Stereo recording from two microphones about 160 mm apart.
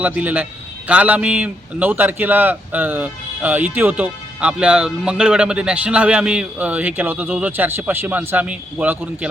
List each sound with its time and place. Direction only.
0.0 s a man's voice: 10° right (ahead or behind)